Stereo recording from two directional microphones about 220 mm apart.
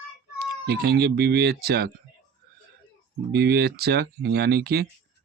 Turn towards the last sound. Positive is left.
turn(degrees=-45)  # may be behind; listen again after turning